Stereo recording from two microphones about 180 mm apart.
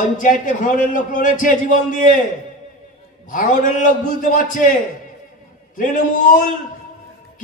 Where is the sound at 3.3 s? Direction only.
45° left (ahead or behind).